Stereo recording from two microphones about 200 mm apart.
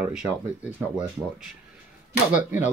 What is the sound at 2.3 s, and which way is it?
Speech, 5° right (ahead or behind).